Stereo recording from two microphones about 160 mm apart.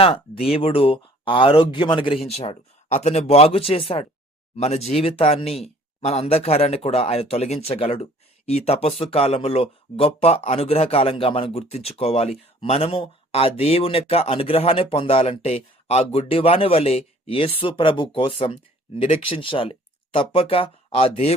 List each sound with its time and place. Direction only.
0.0 s speech: 35° left (ahead or behind)